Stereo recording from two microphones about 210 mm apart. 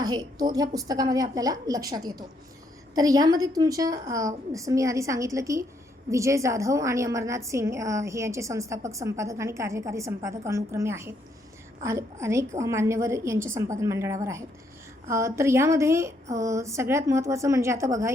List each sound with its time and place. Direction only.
0.0 s a woman's voice: 15° right (ahead or behind)